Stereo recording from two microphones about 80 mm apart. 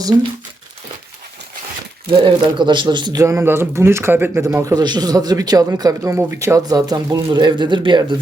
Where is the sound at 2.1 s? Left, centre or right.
Right.